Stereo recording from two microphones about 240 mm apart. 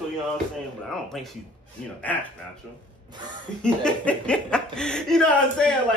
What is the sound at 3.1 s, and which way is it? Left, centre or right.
Speech, centre.